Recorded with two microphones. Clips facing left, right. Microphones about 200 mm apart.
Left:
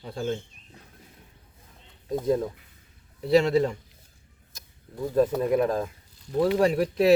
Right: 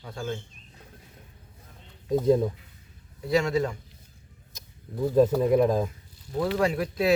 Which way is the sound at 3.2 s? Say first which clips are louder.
Left 4 dB; 30° left (ahead or behind).